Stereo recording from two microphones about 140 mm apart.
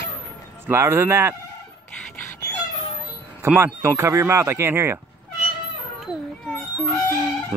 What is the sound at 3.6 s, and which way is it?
Speech, 20° right (ahead or behind).